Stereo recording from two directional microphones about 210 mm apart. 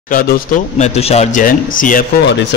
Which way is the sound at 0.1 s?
40° left (ahead or behind).